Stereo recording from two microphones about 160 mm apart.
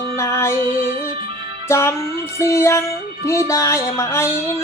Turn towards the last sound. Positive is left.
turn(degrees=15)  # may be behind; listen again after turning